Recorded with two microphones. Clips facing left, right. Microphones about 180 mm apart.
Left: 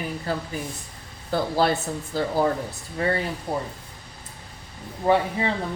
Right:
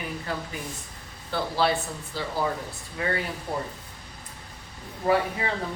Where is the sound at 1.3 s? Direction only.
45° left (ahead or behind).